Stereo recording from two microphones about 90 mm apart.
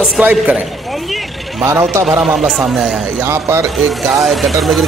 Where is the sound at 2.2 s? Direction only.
5° right (ahead or behind).